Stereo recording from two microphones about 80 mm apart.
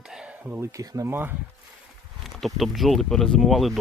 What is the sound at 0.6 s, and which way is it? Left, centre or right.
Speech, right.